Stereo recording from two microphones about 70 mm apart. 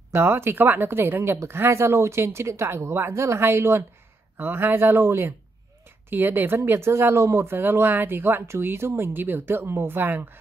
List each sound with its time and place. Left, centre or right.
0.1 s speech: right